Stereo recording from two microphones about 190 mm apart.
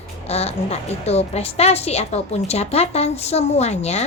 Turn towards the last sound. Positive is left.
turn(degrees=35)  # may be behind; listen again after turning